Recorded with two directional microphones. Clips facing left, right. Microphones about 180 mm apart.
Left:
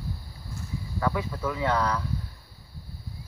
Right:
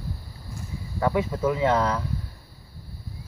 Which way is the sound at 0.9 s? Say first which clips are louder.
Right 5 dB; 25° right (ahead or behind).